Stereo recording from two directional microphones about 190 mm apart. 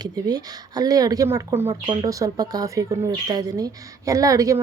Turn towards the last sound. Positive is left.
turn(degrees=-15)  # may be behind; listen again after turning